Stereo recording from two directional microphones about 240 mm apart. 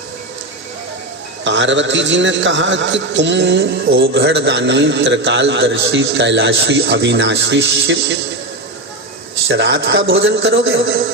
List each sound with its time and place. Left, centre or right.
1.5 s a man's voice: right
9.5 s a man's voice: right